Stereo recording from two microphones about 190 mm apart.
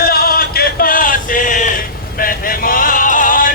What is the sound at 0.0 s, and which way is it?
Male singing, 50° left (ahead or behind).